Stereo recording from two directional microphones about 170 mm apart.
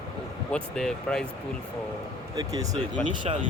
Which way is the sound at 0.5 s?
5° left (ahead or behind).